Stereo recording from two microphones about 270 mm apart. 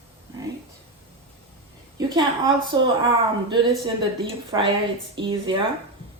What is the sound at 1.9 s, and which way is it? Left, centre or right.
A woman's voice, centre.